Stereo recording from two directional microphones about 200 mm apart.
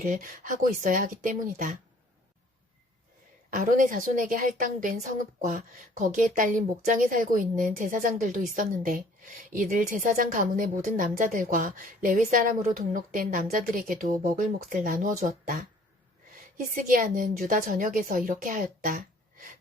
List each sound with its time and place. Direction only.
0.0 s speech: 40° right (ahead or behind)
3.5 s a woman's voice: 40° right (ahead or behind)
16.7 s speech: 45° right (ahead or behind)